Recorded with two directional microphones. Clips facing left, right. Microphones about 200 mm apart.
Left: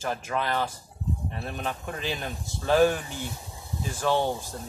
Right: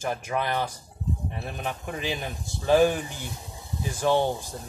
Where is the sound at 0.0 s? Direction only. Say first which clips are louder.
Right 1 dB; 15° right (ahead or behind).